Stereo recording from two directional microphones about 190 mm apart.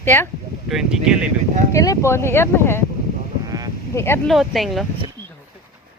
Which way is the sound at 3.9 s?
15° left (ahead or behind).